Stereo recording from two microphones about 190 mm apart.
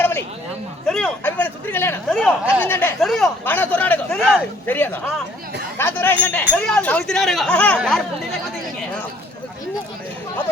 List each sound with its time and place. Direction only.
0.9 s speech: 5° left (ahead or behind)